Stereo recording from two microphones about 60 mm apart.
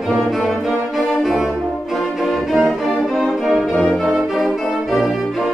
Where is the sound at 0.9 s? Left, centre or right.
Centre.